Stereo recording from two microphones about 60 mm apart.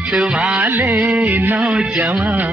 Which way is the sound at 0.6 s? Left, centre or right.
Right.